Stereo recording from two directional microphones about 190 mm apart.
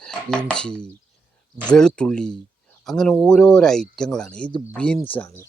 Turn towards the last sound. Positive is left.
turn(degrees=10)  # may be behind; listen again after turning